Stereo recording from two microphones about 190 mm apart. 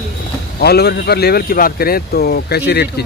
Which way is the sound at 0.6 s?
55° left (ahead or behind).